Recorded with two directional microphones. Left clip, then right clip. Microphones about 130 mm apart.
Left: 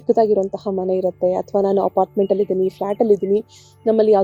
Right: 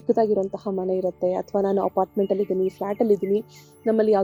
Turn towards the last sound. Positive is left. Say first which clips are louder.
# left 5 dB
turn(degrees=35)  # may be behind; listen again after turning